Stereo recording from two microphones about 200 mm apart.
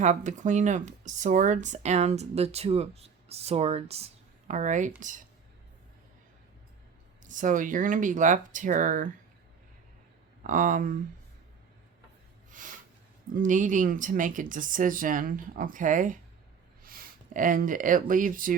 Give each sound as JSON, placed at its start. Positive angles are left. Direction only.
{"t": 0.0, "sound": "speech", "side_deg": -35}
{"t": 7.3, "sound": "speech", "side_deg": -40}
{"t": 10.4, "sound": "speech", "side_deg": -40}
{"t": 12.5, "sound": "a sound", "side_deg": -40}
{"t": 13.3, "sound": "speech", "side_deg": -40}